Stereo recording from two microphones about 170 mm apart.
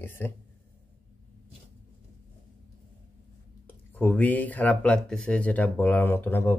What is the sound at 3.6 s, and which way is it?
Speech, 10° left (ahead or behind).